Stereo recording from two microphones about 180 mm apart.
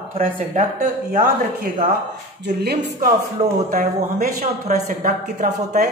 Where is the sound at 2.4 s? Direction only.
65° right (ahead or behind).